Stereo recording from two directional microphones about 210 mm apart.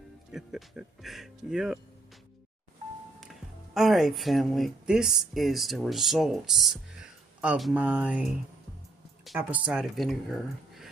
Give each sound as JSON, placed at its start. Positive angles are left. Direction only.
{"t": 0.3, "sound": "speech", "side_deg": 0}
{"t": 3.7, "sound": "speech", "side_deg": 0}